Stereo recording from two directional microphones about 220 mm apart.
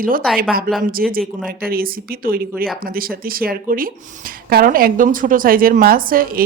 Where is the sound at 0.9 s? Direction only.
40° right (ahead or behind).